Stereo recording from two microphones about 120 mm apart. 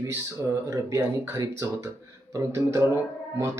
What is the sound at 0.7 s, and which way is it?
Speech, 25° right (ahead or behind).